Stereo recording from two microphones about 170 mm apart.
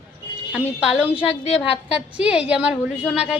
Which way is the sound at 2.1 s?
5° right (ahead or behind).